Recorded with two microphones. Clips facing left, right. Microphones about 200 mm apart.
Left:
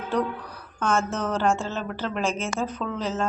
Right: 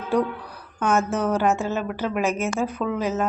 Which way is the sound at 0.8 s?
10° right (ahead or behind).